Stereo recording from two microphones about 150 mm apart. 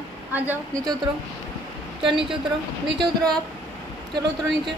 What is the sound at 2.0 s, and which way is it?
Speech, 35° right (ahead or behind).